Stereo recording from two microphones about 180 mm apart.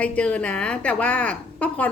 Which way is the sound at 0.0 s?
5° left (ahead or behind).